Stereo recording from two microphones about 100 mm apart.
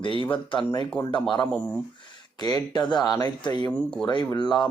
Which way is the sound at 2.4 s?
45° left (ahead or behind).